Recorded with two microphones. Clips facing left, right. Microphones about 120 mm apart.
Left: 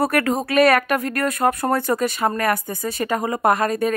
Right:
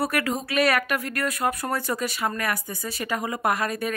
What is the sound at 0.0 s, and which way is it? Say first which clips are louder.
Speech: left 6 dB; 50° left (ahead or behind).